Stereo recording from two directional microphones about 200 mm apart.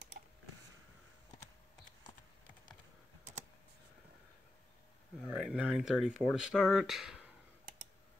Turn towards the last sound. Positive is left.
turn(degrees=0)  # may be behind; listen again after turning